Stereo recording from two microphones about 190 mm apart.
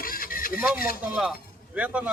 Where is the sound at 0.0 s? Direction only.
50° left (ahead or behind).